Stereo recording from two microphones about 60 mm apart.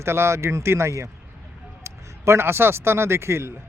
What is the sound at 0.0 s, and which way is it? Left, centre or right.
A man's voice, right.